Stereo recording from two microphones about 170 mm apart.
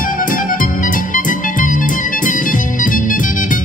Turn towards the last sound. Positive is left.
turn(degrees=50)  # may be behind; listen again after turning